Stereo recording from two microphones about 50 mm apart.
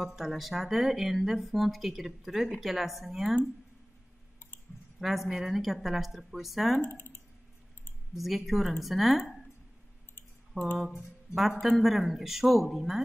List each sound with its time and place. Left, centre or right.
0.0 s speech: centre
4.9 s speech: centre
6.8 s speech: left
8.2 s speech: centre
10.5 s speech: centre